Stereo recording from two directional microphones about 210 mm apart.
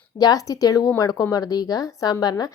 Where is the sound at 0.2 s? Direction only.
15° left (ahead or behind).